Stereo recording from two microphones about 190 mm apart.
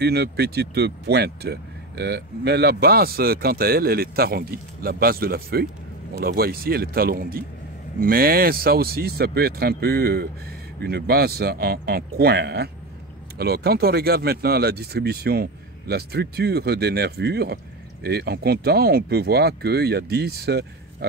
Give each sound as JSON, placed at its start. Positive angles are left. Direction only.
{"t": 0.0, "sound": "speech", "side_deg": -60}